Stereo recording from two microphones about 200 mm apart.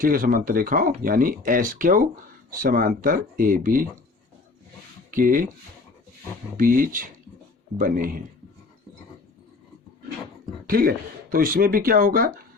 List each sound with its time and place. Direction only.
0.0 s speech: 45° right (ahead or behind)
5.1 s speech: 45° right (ahead or behind)
6.6 s speech: 45° right (ahead or behind)
10.7 s speech: 45° right (ahead or behind)